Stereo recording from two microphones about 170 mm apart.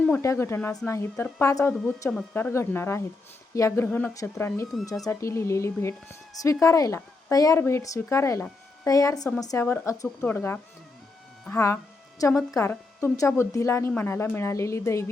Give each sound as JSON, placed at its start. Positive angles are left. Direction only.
{"t": 0.0, "sound": "a woman's voice", "side_deg": 15}
{"t": 12.3, "sound": "speech", "side_deg": 0}
{"t": 12.5, "sound": "a woman's voice", "side_deg": 15}